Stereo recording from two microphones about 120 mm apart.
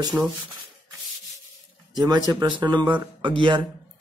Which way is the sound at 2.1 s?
35° right (ahead or behind).